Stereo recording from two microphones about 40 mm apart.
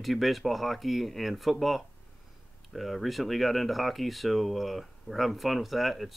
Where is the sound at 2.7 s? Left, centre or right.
Centre.